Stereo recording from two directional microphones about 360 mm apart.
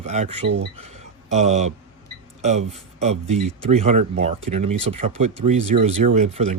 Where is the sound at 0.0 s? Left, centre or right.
Centre.